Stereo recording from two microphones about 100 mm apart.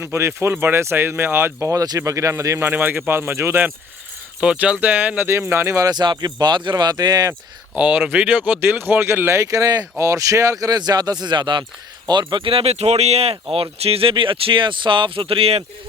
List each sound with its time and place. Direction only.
0.0 s speech: 25° right (ahead or behind)
4.4 s speech: 10° right (ahead or behind); by 7.3 s 40° right (ahead or behind)
7.8 s speech: 10° right (ahead or behind); by 15.6 s 75° right (ahead or behind)